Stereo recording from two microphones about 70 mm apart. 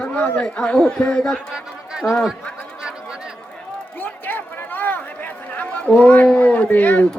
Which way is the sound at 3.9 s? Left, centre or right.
Left.